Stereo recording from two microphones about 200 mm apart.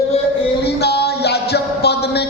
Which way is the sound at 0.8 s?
55° left (ahead or behind).